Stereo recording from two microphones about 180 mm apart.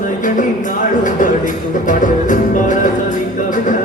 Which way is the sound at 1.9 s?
45° left (ahead or behind).